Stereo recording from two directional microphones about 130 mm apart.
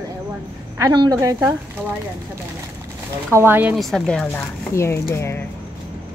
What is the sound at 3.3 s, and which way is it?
Speech, 15° right (ahead or behind).